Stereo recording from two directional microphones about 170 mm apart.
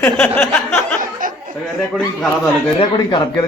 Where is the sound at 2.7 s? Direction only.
30° left (ahead or behind).